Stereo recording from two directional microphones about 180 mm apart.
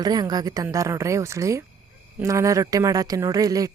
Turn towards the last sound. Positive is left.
turn(degrees=-20)  # may be behind; listen again after turning